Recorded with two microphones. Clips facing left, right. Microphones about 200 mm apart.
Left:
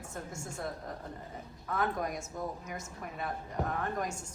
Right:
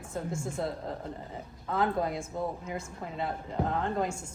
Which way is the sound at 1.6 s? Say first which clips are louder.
Right 4 dB; 25° right (ahead or behind).